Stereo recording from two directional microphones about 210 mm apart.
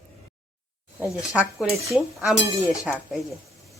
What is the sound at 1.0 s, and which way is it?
Speech, 5° right (ahead or behind).